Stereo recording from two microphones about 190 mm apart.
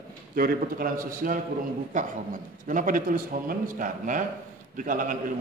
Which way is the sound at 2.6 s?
45° right (ahead or behind).